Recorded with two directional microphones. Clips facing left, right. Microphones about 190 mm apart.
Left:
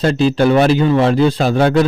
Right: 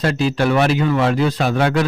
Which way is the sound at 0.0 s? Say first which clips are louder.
Left 5 dB; 30° left (ahead or behind).